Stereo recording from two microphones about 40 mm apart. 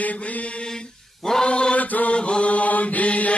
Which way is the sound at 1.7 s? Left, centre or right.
Left.